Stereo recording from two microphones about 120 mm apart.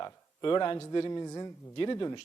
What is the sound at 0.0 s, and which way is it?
A man's voice, 35° left (ahead or behind).